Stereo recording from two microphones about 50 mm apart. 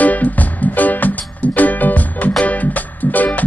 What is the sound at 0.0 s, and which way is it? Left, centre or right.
Music, left.